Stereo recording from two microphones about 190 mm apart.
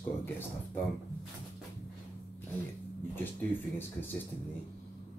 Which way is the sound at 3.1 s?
10° left (ahead or behind).